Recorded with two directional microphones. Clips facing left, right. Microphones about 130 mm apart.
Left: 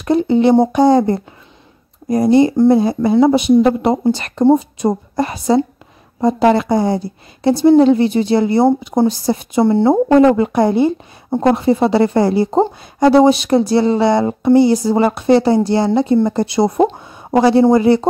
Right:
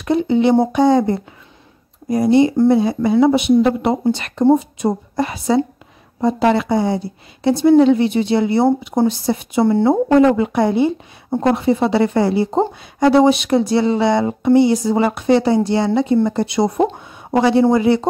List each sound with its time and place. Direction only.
0.0 s speech: 40° left (ahead or behind)